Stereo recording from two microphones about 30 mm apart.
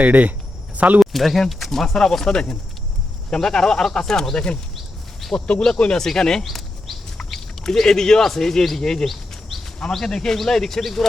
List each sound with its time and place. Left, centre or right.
0.0 s speech: right
1.1 s speech: centre
1.7 s speech: centre
5.2 s a sound: centre
5.7 s speech: left
6.0 s speech: centre
6.4 s a sound: centre
7.6 s speech: centre